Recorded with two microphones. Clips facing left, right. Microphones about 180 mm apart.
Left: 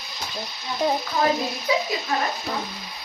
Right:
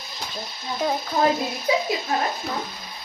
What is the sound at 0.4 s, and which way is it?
Music, 50° right (ahead or behind).